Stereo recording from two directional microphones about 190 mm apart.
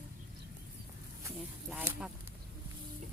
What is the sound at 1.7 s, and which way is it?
Speech, 5° right (ahead or behind).